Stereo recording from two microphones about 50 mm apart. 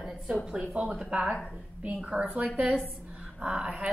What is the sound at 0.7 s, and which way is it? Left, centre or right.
Speech, centre.